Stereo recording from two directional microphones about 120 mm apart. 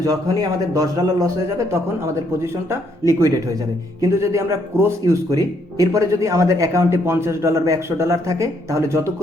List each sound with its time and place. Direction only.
0.0 s a man's voice: 30° right (ahead or behind)